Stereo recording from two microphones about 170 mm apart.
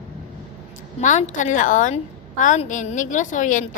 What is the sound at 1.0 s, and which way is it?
A woman's voice, 45° left (ahead or behind).